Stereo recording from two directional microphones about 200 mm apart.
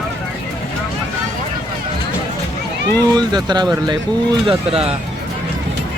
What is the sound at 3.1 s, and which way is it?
Speech, 20° right (ahead or behind).